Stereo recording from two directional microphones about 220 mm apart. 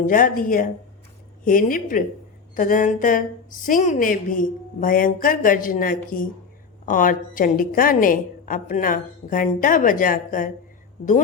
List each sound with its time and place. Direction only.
0.0 s a woman's voice: 40° left (ahead or behind)